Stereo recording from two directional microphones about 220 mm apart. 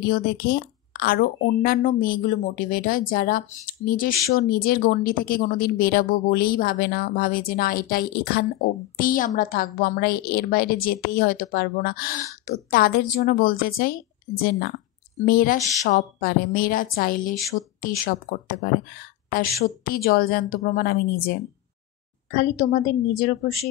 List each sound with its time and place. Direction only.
0.1 s a woman's voice: 45° left (ahead or behind)
15.2 s a woman's voice: 40° left (ahead or behind)
22.3 s a woman's voice: 35° left (ahead or behind)